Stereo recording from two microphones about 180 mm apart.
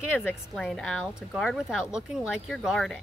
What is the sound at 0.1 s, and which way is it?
A woman's voice, 10° left (ahead or behind).